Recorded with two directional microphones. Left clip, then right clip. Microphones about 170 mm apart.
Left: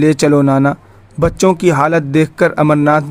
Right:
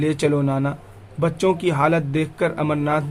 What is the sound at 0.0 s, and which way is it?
Speech, 45° left (ahead or behind).